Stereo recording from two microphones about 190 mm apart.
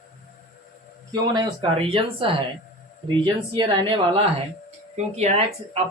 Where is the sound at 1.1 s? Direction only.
20° right (ahead or behind).